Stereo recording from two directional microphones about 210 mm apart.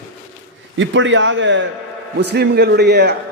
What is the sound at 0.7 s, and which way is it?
A man's voice, 60° right (ahead or behind).